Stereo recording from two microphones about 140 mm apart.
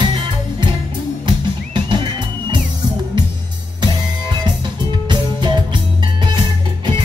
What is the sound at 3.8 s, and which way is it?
Music, 30° right (ahead or behind).